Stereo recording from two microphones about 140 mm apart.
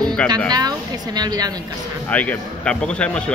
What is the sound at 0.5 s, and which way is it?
Speech, 30° right (ahead or behind).